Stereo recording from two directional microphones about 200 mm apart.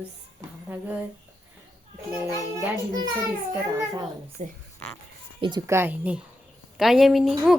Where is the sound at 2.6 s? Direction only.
20° right (ahead or behind).